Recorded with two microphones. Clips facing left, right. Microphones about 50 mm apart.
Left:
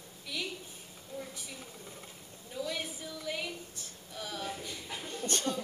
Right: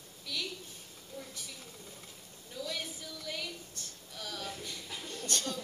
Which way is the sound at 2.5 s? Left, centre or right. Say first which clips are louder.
Left 3 dB; centre.